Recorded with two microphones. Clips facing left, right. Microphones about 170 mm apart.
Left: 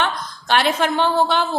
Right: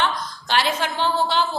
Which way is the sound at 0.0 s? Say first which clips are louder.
Left 1 dB; 55° left (ahead or behind).